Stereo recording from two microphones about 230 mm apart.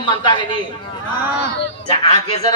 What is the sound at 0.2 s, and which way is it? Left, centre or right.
Speech, left.